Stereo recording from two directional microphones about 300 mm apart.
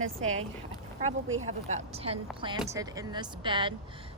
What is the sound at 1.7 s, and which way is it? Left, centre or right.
A woman's voice, centre.